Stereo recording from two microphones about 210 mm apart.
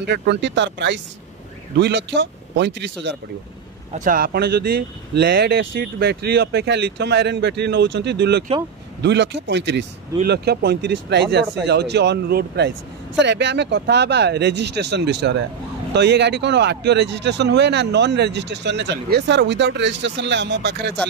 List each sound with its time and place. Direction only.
0.0 s speech: 55° right (ahead or behind)
3.9 s speech: 40° right (ahead or behind); by 20.9 s 55° right (ahead or behind)